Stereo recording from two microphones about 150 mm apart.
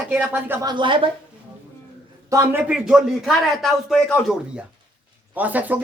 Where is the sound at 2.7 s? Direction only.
5° right (ahead or behind).